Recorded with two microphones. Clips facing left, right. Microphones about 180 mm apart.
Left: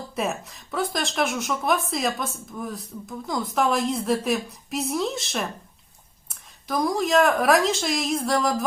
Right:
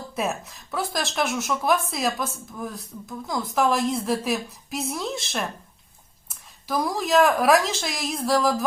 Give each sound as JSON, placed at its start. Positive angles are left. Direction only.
{"t": 0.2, "sound": "speech", "side_deg": 0}
{"t": 6.7, "sound": "speech", "side_deg": 0}